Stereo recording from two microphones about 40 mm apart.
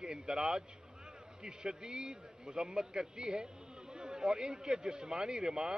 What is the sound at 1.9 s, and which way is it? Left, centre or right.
Speech, centre.